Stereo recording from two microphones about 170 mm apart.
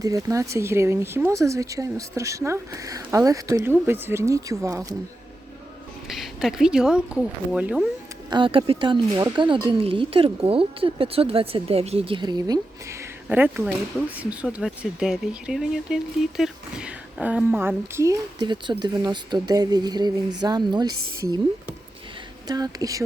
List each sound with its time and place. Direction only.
0.0 s speech: 20° right (ahead or behind)
6.1 s speech: centre (ahead or behind)
8.3 s a woman's voice: 30° right (ahead or behind)
22.4 s a woman's voice: 25° right (ahead or behind)